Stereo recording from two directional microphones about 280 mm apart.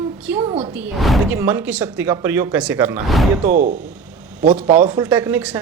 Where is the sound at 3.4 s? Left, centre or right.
Right.